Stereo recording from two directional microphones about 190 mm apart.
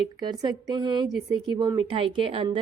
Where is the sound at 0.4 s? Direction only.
25° right (ahead or behind).